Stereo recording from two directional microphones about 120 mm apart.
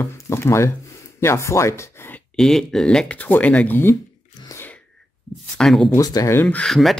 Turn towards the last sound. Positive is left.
turn(degrees=0)  # may be behind; listen again after turning